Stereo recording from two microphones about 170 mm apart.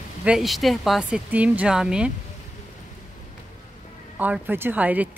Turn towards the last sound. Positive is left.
turn(degrees=-10)  # may be behind; listen again after turning